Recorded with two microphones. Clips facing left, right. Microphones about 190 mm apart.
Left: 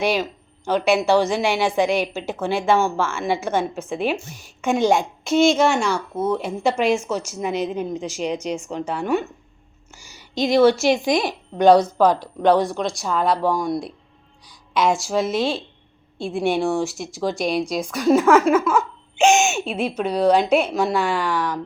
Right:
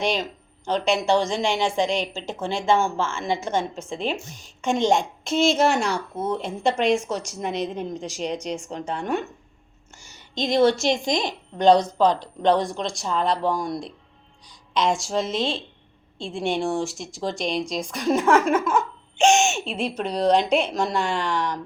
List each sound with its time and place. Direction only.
0.0 s a woman's voice: 5° left (ahead or behind)
19.1 s speech: 30° right (ahead or behind)
20.0 s a woman's voice: 5° left (ahead or behind)